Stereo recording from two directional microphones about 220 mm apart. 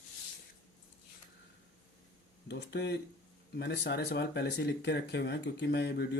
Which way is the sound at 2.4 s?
50° left (ahead or behind).